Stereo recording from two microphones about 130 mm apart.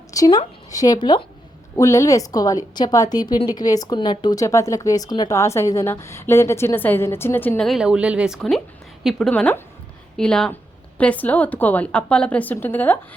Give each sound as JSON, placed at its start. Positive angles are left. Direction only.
{"t": 0.1, "sound": "a woman's voice", "side_deg": 30}
{"t": 1.7, "sound": "speech", "side_deg": 25}
{"t": 7.6, "sound": "speech", "side_deg": 0}
{"t": 8.4, "sound": "a woman's voice", "side_deg": 0}
{"t": 9.3, "sound": "speech", "side_deg": 15}